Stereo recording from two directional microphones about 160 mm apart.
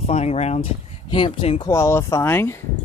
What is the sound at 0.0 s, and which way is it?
Speech, 40° left (ahead or behind).